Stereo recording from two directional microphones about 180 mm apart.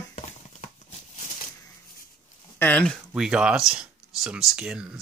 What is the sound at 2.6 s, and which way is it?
Speech, 5° left (ahead or behind).